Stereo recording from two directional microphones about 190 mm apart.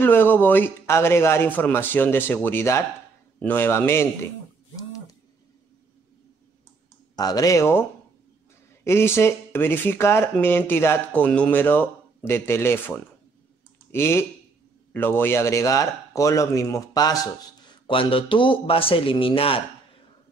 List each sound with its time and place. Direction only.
0.0 s speech: 10° left (ahead or behind)
7.2 s speech: 20° left (ahead or behind)
8.8 s speech: 15° left (ahead or behind); by 19.6 s 30° left (ahead or behind)